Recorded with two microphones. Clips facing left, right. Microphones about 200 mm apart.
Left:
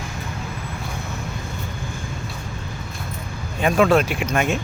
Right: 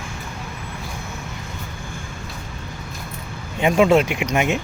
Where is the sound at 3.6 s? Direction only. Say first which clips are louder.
Right 1 dB; 20° right (ahead or behind).